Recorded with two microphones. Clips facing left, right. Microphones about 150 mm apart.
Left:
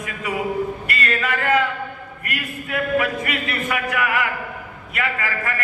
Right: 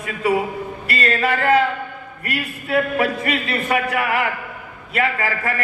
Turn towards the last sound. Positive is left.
turn(degrees=-30)  # may be behind; listen again after turning